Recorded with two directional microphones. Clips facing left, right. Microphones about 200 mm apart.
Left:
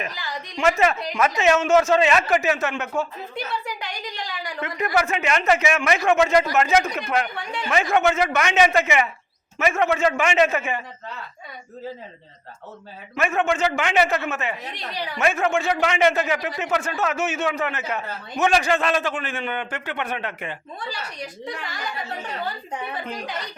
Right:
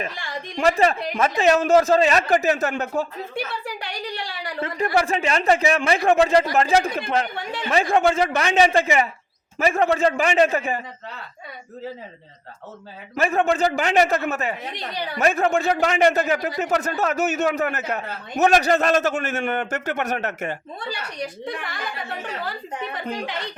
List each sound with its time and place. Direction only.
0.0 s speech: 30° right (ahead or behind)
4.2 s speech: 30° right (ahead or behind)
13.1 s a man's voice: 35° right (ahead or behind)
21.6 s speech: 55° right (ahead or behind)